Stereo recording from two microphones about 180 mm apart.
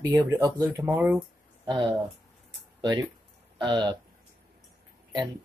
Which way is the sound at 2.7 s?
25° right (ahead or behind).